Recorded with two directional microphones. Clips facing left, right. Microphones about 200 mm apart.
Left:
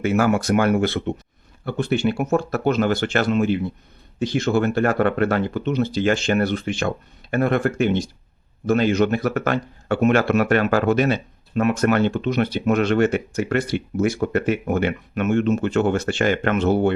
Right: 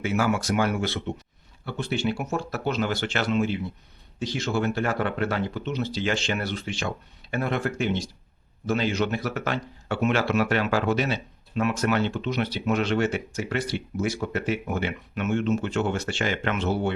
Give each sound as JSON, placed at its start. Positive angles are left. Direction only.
{"t": 0.0, "sound": "speech", "side_deg": 55}